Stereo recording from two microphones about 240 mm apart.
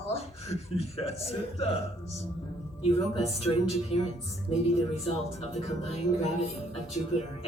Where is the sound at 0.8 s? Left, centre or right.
Left.